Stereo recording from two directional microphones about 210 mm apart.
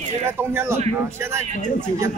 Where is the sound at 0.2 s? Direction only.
10° right (ahead or behind).